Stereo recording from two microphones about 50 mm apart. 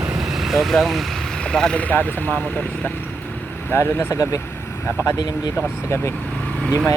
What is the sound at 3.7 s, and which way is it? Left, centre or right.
Speech, left.